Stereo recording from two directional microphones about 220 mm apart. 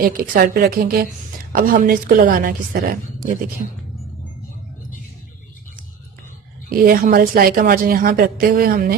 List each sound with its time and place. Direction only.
0.0 s a woman's voice: 40° right (ahead or behind)
6.7 s a woman's voice: 40° right (ahead or behind)